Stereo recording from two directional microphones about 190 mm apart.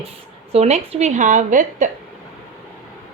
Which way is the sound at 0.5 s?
35° right (ahead or behind).